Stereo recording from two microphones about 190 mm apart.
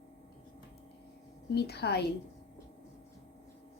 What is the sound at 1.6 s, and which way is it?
Speech, 60° left (ahead or behind).